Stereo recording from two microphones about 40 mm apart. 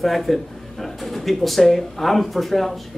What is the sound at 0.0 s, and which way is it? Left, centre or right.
Speech, centre.